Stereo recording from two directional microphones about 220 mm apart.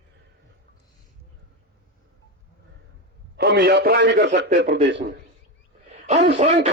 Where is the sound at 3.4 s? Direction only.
50° right (ahead or behind).